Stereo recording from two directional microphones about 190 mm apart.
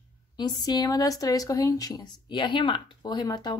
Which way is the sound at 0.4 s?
20° left (ahead or behind).